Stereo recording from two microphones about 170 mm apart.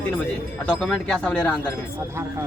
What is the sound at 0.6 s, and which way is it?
Speech, 5° left (ahead or behind).